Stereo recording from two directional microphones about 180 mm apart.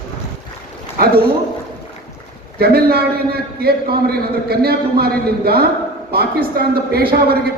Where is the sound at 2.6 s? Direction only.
60° right (ahead or behind).